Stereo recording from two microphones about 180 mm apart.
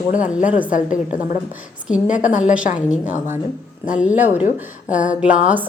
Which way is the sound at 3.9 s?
5° right (ahead or behind).